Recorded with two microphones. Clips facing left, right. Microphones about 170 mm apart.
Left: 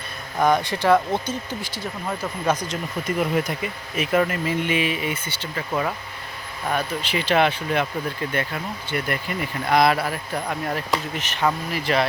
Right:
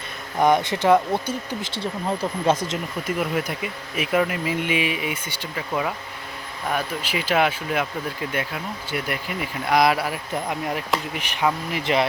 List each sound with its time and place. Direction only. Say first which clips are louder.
0.3 s speech: right 1 dB; 20° right (ahead or behind)
1.6 s speech: right 3 dB; 25° right (ahead or behind)
3.2 s speech: left 3 dB; 5° right (ahead or behind); by 12.0 s 20° right (ahead or behind)